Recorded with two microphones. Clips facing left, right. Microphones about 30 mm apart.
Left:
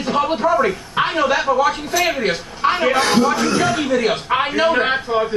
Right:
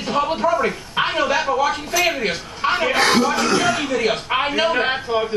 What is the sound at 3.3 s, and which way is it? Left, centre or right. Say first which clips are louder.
Speech: even; right.